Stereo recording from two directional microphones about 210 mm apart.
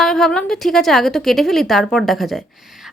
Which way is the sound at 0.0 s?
5° left (ahead or behind).